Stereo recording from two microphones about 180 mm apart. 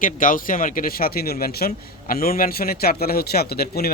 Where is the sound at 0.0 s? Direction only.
50° left (ahead or behind).